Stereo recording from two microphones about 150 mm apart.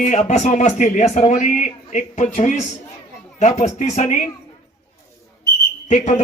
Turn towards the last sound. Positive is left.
turn(degrees=50)  # may be behind; listen again after turning